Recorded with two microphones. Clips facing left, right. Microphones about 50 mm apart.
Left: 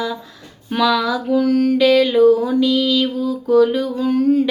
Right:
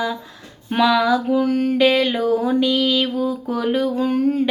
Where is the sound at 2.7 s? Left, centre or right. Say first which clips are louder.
Left 2 dB; right.